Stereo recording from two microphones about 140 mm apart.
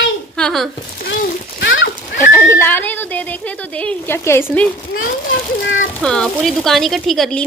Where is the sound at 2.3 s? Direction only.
15° left (ahead or behind).